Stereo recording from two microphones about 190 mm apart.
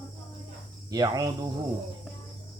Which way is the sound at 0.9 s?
20° right (ahead or behind).